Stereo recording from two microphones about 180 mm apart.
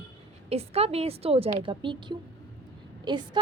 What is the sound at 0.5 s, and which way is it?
A woman's voice, 35° right (ahead or behind).